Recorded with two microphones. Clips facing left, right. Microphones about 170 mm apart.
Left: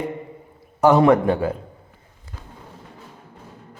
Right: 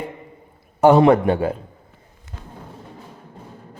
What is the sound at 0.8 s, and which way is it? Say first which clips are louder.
Speech: right 2 dB; 25° right (ahead or behind).